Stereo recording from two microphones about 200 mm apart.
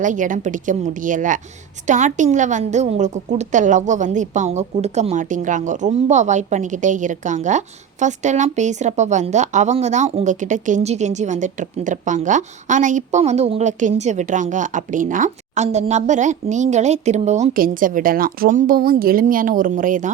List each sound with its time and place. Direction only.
0.0 s a woman's voice: 40° right (ahead or behind)